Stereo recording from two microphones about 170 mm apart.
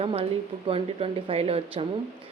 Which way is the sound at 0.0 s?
35° right (ahead or behind).